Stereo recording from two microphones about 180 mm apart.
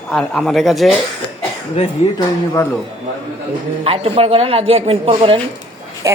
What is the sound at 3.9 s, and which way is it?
A woman's voice, 35° right (ahead or behind).